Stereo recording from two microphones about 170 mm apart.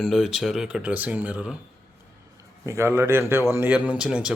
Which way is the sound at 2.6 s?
15° right (ahead or behind).